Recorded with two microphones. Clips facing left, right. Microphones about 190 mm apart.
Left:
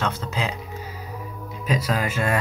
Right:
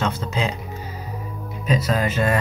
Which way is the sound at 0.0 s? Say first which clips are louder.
Right 3 dB; 5° left (ahead or behind).